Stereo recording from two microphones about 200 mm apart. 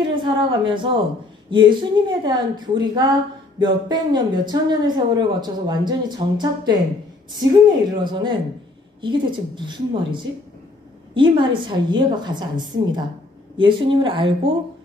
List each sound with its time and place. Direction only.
0.2 s speech: 25° right (ahead or behind)